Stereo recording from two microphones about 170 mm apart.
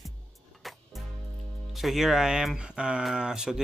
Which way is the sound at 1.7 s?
Centre (ahead or behind).